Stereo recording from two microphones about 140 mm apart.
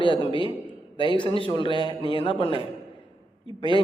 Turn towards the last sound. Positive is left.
turn(degrees=35)  # may be behind; listen again after turning